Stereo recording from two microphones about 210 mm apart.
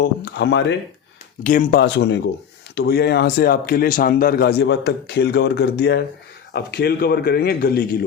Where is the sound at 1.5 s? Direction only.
40° left (ahead or behind).